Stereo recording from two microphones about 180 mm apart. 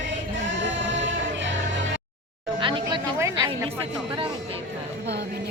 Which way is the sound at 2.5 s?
25° right (ahead or behind).